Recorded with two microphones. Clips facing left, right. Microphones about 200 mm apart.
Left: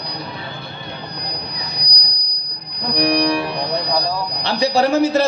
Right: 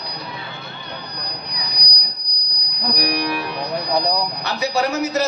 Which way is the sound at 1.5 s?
25° left (ahead or behind).